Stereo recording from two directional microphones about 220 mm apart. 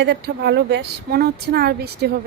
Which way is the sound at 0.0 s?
50° right (ahead or behind).